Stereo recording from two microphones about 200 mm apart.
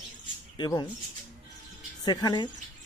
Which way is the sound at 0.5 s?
20° left (ahead or behind).